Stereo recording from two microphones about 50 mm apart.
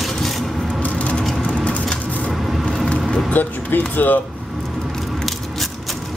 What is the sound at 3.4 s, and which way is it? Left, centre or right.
Speech, left.